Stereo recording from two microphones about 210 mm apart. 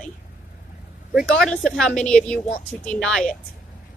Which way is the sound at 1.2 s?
Centre (ahead or behind).